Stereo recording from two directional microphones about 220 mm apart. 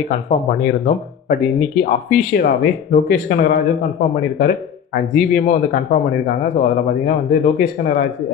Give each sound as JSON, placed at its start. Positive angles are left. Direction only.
{"t": 0.3, "sound": "speech", "side_deg": 40}